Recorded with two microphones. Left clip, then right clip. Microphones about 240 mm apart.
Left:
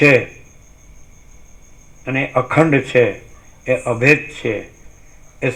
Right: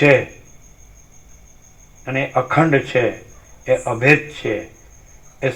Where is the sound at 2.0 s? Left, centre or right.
Left.